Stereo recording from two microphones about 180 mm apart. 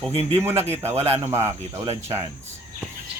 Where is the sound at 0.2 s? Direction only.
15° right (ahead or behind).